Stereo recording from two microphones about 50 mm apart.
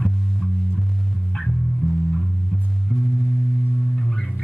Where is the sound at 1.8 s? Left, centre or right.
Left.